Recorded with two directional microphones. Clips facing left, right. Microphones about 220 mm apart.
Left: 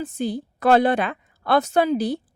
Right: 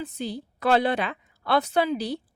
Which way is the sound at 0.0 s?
50° left (ahead or behind).